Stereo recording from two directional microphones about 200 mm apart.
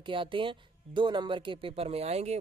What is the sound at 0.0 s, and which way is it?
Speech, 25° right (ahead or behind).